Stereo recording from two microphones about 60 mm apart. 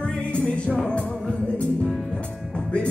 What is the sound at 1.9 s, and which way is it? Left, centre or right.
Music, centre.